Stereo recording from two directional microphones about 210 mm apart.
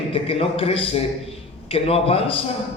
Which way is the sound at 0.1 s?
25° left (ahead or behind).